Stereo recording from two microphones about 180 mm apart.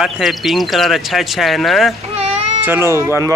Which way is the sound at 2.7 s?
15° right (ahead or behind).